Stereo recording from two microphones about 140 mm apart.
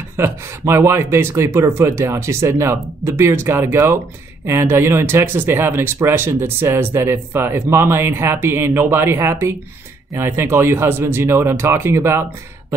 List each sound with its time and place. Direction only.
0.2 s speech: 20° right (ahead or behind)